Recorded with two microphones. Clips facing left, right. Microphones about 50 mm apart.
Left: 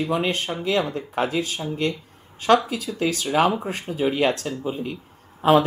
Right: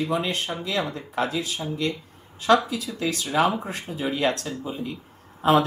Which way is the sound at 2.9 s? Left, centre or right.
Left.